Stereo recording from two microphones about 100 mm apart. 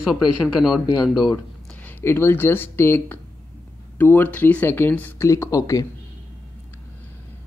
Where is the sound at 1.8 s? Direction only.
20° left (ahead or behind).